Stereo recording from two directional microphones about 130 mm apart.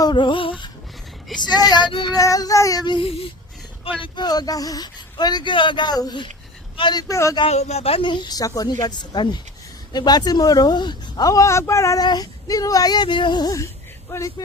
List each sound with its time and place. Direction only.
0.0 s speech: 35° left (ahead or behind)
4.0 s a man's voice: 35° left (ahead or behind)
7.1 s speech: 25° left (ahead or behind)
7.4 s speech: 55° left (ahead or behind); by 14.4 s 25° left (ahead or behind)